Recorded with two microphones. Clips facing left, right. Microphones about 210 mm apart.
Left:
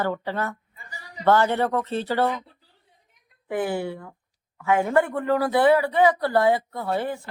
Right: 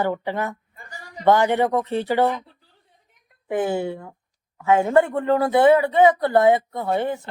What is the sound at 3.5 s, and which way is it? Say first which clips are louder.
Speech: right 3 dB; 25° right (ahead or behind).